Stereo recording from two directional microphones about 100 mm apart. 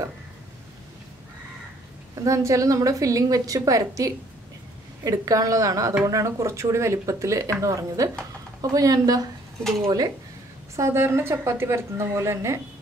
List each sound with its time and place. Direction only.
2.2 s a woman's voice: 30° right (ahead or behind)
9.6 s speech: 5° left (ahead or behind)
10.8 s a woman's voice: 25° right (ahead or behind)